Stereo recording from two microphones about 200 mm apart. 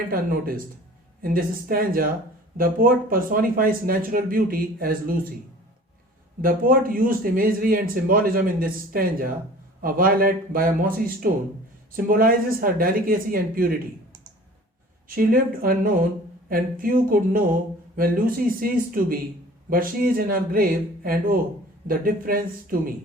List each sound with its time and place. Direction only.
0.1 s speech: 45° right (ahead or behind)
6.4 s speech: 45° right (ahead or behind)
15.0 s speech: 45° right (ahead or behind)